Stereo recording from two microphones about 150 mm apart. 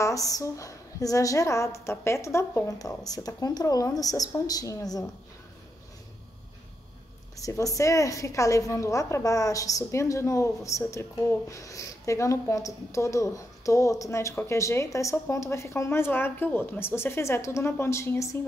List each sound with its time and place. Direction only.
0.0 s a woman's voice: 20° left (ahead or behind)
7.3 s a woman's voice: 20° left (ahead or behind)